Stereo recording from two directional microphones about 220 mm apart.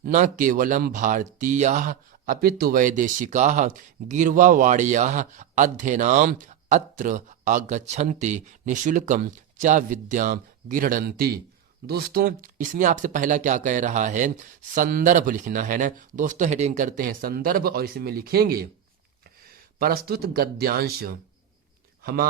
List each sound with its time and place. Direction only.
0.0 s speech: 35° right (ahead or behind)
19.8 s speech: 45° right (ahead or behind)